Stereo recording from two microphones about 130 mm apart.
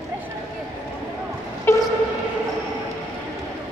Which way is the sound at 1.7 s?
15° left (ahead or behind).